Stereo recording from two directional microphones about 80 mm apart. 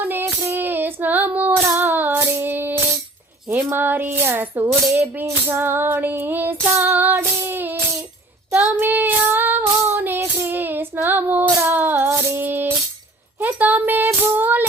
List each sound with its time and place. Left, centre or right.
0.1 s child singing: right
3.5 s speech: right
6.8 s child singing: right
11.7 s music: right
13.4 s a sound: right
14.3 s female singing: right